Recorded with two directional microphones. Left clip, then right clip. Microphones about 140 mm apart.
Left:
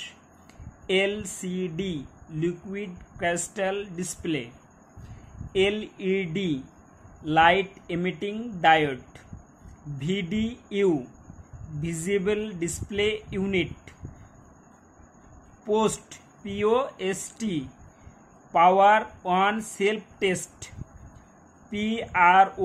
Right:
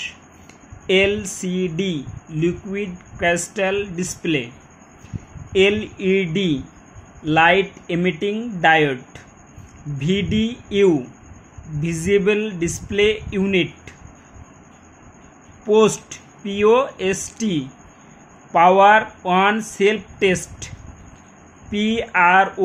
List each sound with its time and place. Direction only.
0.8 s speech: 35° right (ahead or behind)
5.5 s speech: 35° right (ahead or behind)
15.6 s speech: 35° right (ahead or behind)